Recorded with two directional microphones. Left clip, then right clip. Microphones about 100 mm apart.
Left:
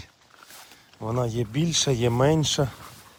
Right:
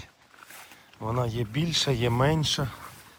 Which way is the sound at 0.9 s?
40° left (ahead or behind).